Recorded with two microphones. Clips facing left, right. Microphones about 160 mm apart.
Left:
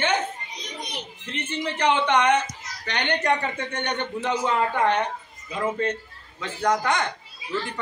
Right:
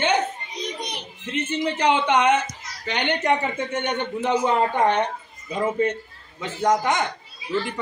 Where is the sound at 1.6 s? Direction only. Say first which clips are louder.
Right 1 dB; 15° right (ahead or behind).